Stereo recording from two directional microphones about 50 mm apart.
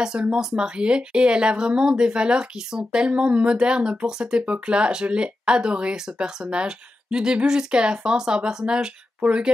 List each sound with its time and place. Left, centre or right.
0.0 s a woman's voice: centre